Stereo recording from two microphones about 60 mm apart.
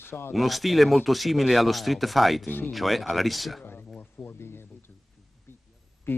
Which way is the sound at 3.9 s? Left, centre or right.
Left.